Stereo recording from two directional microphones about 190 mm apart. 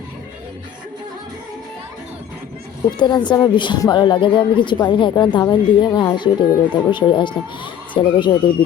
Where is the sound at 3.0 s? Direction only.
25° left (ahead or behind).